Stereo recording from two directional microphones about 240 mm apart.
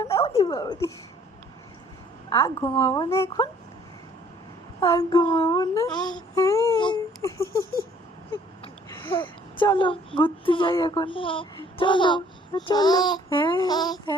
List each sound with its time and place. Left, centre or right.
0.0 s speech: centre
2.3 s speech: centre
4.8 s speech: centre
8.9 s a woman's voice: centre